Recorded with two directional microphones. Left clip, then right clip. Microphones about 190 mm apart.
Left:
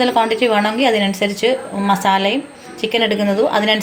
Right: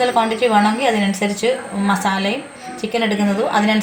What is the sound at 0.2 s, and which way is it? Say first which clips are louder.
A woman's voice: even; 40° left (ahead or behind).